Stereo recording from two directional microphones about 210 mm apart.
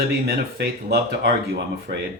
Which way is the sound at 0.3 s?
50° right (ahead or behind).